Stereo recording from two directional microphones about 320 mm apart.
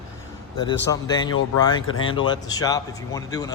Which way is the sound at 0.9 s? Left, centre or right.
Centre.